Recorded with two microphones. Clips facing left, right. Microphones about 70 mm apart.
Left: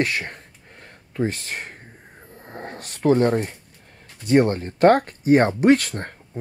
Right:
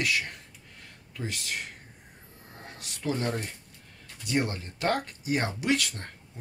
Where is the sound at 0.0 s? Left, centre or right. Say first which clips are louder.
Left 5 dB; left.